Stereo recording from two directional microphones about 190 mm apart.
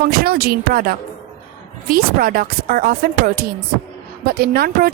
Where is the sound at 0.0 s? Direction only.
55° right (ahead or behind).